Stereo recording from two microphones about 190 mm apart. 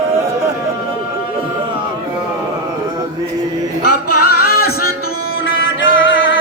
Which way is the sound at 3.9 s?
55° left (ahead or behind).